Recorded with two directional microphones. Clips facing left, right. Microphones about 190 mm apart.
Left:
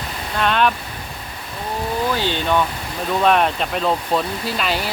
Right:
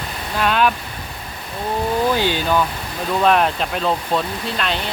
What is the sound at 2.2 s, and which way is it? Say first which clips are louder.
Speech: right 1 dB; 10° right (ahead or behind).